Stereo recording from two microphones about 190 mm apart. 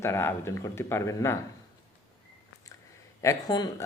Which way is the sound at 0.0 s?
15° left (ahead or behind).